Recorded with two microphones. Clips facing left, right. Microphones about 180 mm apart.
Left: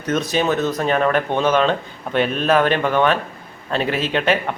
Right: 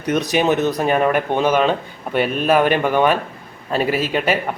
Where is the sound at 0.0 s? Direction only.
15° right (ahead or behind).